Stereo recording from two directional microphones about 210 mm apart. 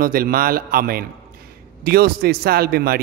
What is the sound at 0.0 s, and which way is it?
Speech, 45° right (ahead or behind).